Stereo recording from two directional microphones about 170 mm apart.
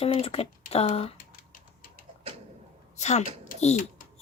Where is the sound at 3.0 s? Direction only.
40° left (ahead or behind).